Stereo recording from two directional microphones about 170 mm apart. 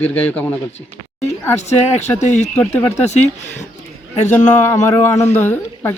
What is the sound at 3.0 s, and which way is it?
Speech, 40° left (ahead or behind).